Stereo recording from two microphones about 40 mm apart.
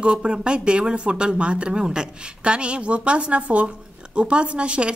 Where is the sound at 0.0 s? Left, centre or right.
Right.